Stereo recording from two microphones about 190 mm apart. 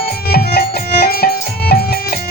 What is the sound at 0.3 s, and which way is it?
Music, 55° left (ahead or behind).